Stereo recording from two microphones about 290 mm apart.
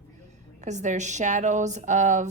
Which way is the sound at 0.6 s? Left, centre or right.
Right.